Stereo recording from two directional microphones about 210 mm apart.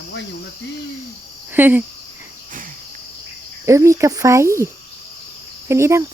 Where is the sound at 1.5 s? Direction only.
10° right (ahead or behind).